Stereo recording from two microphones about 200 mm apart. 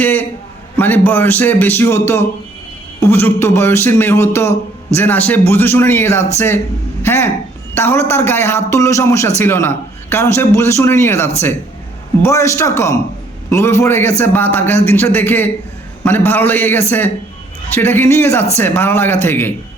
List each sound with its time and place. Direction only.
0.0 s a man's voice: 10° left (ahead or behind)